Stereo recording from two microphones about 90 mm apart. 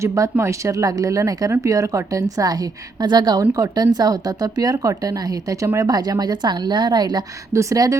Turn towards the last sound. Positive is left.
turn(degrees=-40)  # may be behind; listen again after turning